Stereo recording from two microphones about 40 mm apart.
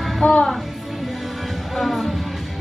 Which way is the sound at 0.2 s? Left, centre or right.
Left.